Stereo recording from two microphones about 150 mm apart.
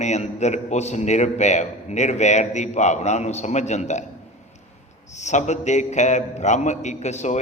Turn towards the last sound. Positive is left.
turn(degrees=50)  # may be behind; listen again after turning